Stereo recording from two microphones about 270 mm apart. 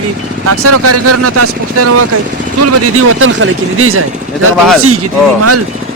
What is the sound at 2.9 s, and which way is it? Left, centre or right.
Speech, right.